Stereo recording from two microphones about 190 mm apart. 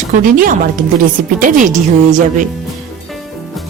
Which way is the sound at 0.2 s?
45° right (ahead or behind).